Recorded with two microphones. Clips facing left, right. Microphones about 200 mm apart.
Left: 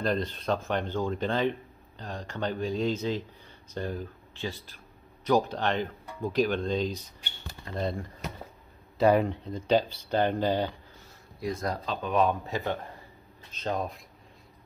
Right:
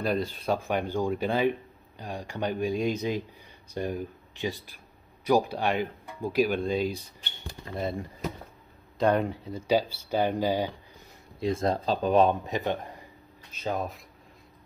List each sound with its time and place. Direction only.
0.0 s speech: 10° right (ahead or behind)
8.9 s speech: 5° left (ahead or behind); by 10.7 s 10° right (ahead or behind)
11.3 s speech: 25° right (ahead or behind)
12.4 s speech: 20° right (ahead or behind)
13.5 s speech: 10° right (ahead or behind)